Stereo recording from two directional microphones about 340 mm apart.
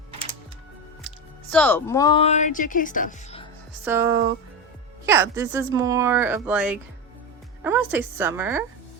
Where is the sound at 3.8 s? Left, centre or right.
Centre.